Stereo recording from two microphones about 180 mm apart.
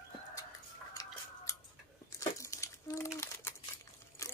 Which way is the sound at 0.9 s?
20° left (ahead or behind).